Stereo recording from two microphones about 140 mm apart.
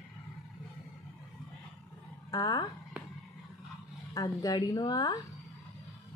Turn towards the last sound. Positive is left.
turn(degrees=30)  # may be behind; listen again after turning